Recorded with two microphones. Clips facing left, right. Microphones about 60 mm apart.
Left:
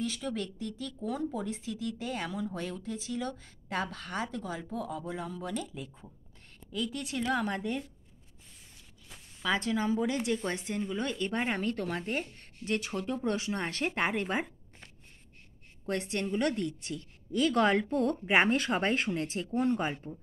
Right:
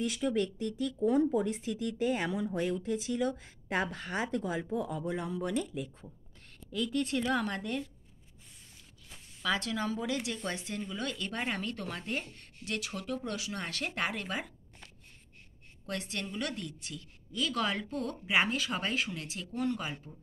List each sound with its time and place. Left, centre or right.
0.2 s speech: centre
4.6 s a woman's voice: centre
9.6 s speech: left